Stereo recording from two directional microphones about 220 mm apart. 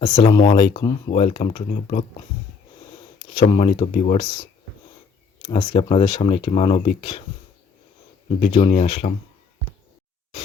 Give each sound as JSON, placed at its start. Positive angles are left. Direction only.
{"t": 0.0, "sound": "speech", "side_deg": 20}
{"t": 3.3, "sound": "speech", "side_deg": 25}
{"t": 8.4, "sound": "speech", "side_deg": 30}